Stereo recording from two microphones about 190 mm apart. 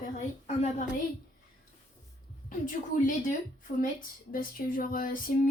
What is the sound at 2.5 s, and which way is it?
A woman's voice, 45° left (ahead or behind).